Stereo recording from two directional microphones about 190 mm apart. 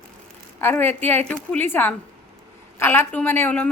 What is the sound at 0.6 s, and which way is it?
A woman's voice, 10° left (ahead or behind).